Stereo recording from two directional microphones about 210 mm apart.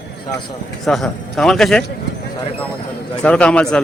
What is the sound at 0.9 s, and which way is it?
Speech, centre (ahead or behind).